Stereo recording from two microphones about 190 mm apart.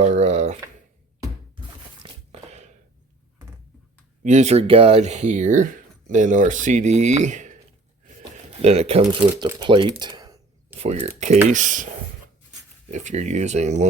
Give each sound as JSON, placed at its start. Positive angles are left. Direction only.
{"t": 0.0, "sound": "speech", "side_deg": -40}
{"t": 2.0, "sound": "a sound", "side_deg": -35}
{"t": 4.2, "sound": "speech", "side_deg": -40}
{"t": 9.5, "sound": "a sound", "side_deg": -20}
{"t": 10.8, "sound": "speech", "side_deg": -35}
{"t": 12.9, "sound": "speech", "side_deg": -40}